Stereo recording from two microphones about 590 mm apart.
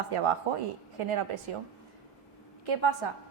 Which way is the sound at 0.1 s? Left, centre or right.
Right.